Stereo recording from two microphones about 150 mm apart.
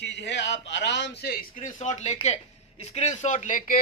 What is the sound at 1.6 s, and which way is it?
Speech, 55° left (ahead or behind).